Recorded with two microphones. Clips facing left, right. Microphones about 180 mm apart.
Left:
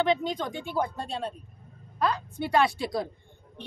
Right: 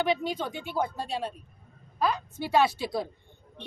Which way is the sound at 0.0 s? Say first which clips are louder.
Left 2 dB; 5° right (ahead or behind).